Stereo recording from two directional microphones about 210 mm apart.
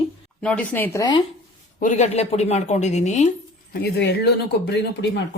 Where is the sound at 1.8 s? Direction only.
35° left (ahead or behind).